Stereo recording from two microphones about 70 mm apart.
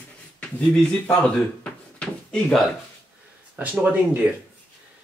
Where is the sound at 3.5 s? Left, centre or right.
Right.